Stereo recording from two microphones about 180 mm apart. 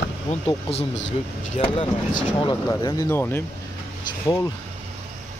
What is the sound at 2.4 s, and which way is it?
A man's voice, 20° left (ahead or behind).